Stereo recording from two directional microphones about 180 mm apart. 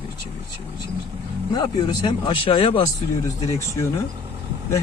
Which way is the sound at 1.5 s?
25° left (ahead or behind).